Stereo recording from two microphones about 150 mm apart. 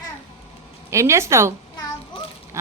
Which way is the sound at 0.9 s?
20° right (ahead or behind).